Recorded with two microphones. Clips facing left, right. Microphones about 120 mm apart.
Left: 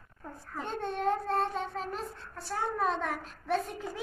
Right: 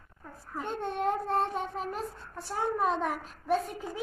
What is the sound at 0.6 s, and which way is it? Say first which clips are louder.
A child's voice: right 2 dB; 15° right (ahead or behind).